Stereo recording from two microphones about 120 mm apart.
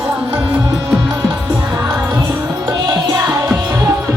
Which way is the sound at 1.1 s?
25° right (ahead or behind).